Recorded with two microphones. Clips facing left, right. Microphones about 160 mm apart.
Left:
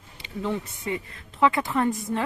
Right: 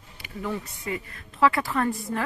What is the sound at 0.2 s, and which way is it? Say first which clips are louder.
A woman's voice: left 3 dB; 25° left (ahead or behind).